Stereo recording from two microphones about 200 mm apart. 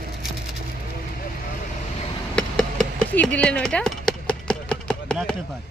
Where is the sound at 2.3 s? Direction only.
5° left (ahead or behind).